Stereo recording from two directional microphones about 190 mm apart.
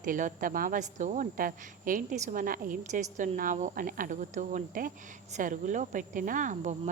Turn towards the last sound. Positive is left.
turn(degrees=-40)  # may be behind; listen again after turning